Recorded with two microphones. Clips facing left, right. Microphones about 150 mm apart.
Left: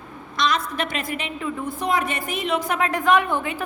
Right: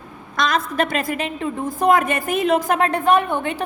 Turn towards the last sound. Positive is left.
turn(degrees=-30)  # may be behind; listen again after turning